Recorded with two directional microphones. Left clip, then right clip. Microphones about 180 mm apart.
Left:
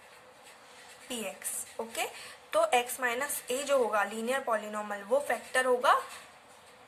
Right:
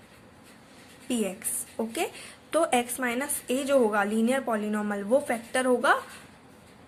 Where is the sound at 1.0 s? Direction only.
15° right (ahead or behind).